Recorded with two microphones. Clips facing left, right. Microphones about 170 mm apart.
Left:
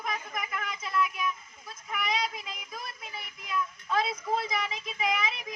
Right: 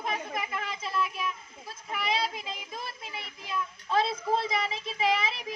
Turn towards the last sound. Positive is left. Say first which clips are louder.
# right 3 dB
turn(degrees=-30)  # may be behind; listen again after turning